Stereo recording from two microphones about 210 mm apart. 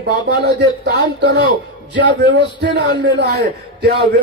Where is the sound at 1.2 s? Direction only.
55° right (ahead or behind).